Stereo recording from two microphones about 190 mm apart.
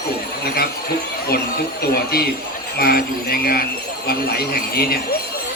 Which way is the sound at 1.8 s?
55° left (ahead or behind).